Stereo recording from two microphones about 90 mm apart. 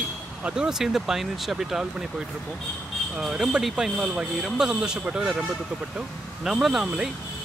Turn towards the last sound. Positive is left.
turn(degrees=-5)  # may be behind; listen again after turning